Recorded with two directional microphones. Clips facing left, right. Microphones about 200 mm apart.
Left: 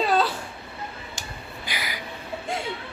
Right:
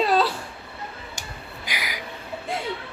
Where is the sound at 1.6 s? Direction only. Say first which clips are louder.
Right 1 dB; 10° right (ahead or behind).